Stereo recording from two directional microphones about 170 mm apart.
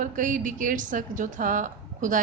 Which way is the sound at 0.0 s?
50° right (ahead or behind).